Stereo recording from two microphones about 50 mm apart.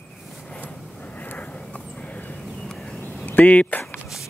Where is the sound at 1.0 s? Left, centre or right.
Left.